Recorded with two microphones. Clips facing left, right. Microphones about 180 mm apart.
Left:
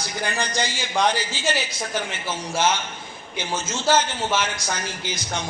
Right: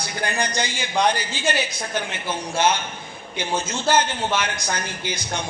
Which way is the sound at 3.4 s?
60° right (ahead or behind).